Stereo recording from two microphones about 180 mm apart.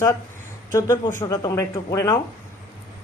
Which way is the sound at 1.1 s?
20° left (ahead or behind).